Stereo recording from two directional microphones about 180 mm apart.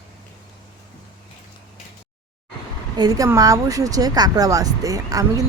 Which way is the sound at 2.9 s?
20° right (ahead or behind).